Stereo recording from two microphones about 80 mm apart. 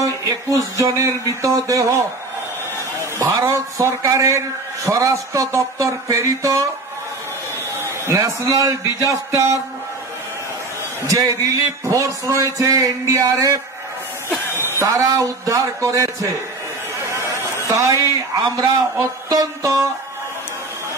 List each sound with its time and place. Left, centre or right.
0.0 s a sound: right
0.7 s speech: right
3.3 s speech: right
7.8 s a man's voice: right
11.1 s speech: right
14.9 s speech: right
17.1 s a sound: right
18.0 s speech: right
19.2 s music: right